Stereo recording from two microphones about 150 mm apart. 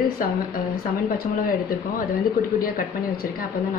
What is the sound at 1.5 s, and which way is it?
Speech, 70° left (ahead or behind).